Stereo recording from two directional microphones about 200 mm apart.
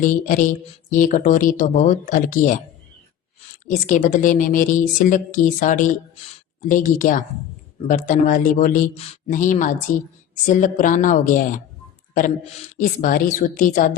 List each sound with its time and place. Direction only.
0.0 s speech: 40° left (ahead or behind)
3.8 s speech: 40° left (ahead or behind)
12.7 s a woman's voice: 45° left (ahead or behind)